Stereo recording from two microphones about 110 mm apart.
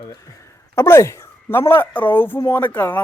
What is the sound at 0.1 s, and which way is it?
A man's voice, 30° left (ahead or behind).